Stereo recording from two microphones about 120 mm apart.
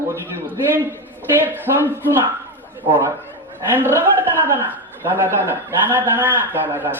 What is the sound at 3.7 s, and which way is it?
Speech, 15° right (ahead or behind).